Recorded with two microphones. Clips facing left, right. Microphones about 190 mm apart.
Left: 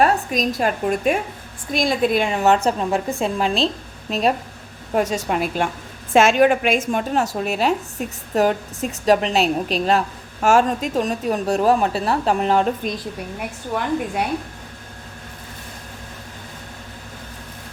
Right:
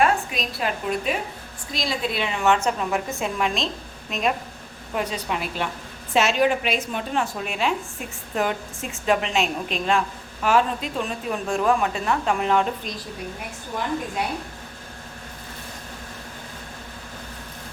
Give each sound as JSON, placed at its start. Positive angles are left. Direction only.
{"t": 0.0, "sound": "a woman's voice", "side_deg": 40}
{"t": 4.9, "sound": "a woman's voice", "side_deg": 45}
{"t": 12.8, "sound": "a woman's voice", "side_deg": 50}
{"t": 13.7, "sound": "a woman's voice", "side_deg": 65}